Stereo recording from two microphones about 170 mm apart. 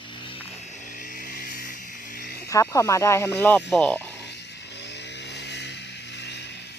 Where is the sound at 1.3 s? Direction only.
55° left (ahead or behind).